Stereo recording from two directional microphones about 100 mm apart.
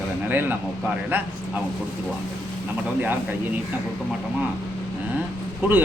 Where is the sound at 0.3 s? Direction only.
20° right (ahead or behind).